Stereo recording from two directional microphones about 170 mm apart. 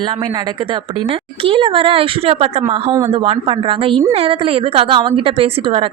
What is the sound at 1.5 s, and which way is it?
A woman's voice, 30° right (ahead or behind).